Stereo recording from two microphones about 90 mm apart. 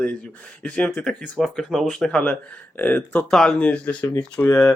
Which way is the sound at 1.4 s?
Centre (ahead or behind).